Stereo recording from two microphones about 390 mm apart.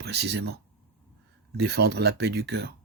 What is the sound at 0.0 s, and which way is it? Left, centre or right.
Speech, right.